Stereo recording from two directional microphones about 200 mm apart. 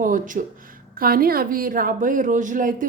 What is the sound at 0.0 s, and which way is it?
Speech, 40° right (ahead or behind).